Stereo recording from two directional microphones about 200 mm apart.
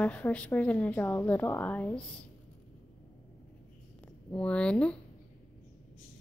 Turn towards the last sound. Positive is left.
turn(degrees=5)  # may be behind; listen again after turning